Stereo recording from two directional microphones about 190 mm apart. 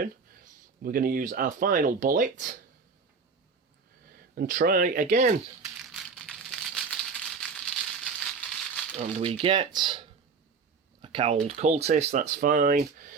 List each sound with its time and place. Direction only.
0.0 s speech: 50° right (ahead or behind)
4.4 s speech: 50° right (ahead or behind)
5.8 s a sound: centre (ahead or behind)
9.0 s speech: 30° right (ahead or behind)
11.0 s a sound: 25° right (ahead or behind)
11.4 s speech: 35° right (ahead or behind)